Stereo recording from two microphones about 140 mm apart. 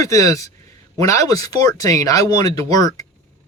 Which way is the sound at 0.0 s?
25° left (ahead or behind).